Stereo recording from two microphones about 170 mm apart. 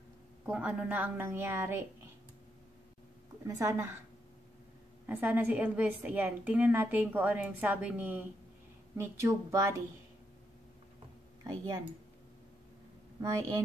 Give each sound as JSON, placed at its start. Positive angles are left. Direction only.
{"t": 0.5, "sound": "a woman's voice", "side_deg": -5}
{"t": 3.4, "sound": "a woman's voice", "side_deg": -20}
{"t": 5.0, "sound": "a woman's voice", "side_deg": -10}
{"t": 13.2, "sound": "a woman's voice", "side_deg": -20}